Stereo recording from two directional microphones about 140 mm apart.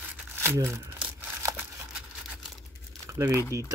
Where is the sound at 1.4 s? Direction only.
20° right (ahead or behind).